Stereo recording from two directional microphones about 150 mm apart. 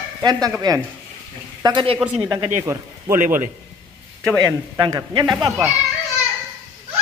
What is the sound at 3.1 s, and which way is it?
Speech, 60° right (ahead or behind).